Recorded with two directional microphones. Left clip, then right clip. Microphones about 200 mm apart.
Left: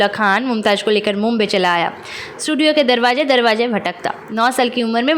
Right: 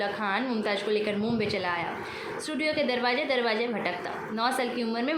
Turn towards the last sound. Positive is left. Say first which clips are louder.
# left 13 dB
turn(degrees=45)  # may be behind; listen again after turning